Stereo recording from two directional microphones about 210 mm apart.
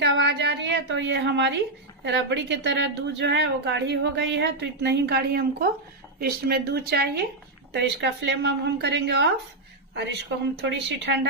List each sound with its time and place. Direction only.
0.0 s a woman's voice: 55° right (ahead or behind)
10.6 s a woman's voice: 55° right (ahead or behind)